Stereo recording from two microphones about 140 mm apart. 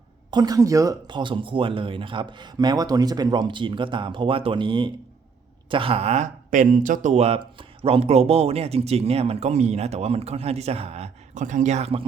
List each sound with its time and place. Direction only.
0.3 s speech: 30° right (ahead or behind); by 12.0 s 50° right (ahead or behind)